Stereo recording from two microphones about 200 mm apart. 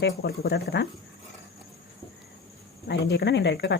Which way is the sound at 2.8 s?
55° left (ahead or behind).